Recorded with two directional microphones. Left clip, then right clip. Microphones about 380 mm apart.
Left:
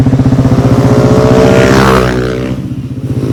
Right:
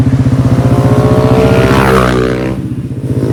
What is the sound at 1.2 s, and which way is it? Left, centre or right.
Vehicle, left.